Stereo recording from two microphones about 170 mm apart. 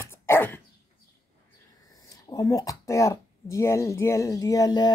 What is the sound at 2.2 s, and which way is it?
Speech, 20° left (ahead or behind).